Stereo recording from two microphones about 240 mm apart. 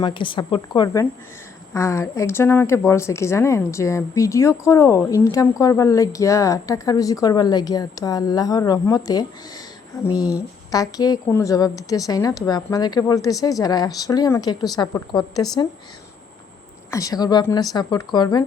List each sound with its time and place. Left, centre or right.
0.0 s a woman's voice: centre
10.3 s a woman's voice: centre
16.9 s a woman's voice: centre